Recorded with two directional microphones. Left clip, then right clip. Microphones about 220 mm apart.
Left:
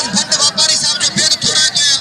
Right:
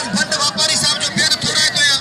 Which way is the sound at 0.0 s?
10° left (ahead or behind).